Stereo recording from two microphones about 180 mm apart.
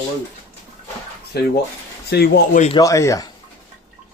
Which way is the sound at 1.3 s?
65° left (ahead or behind).